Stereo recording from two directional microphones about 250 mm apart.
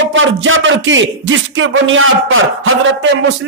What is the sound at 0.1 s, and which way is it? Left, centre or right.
A man's voice, right.